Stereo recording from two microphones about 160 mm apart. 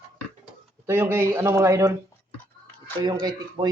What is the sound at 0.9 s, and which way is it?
Speech, 15° right (ahead or behind).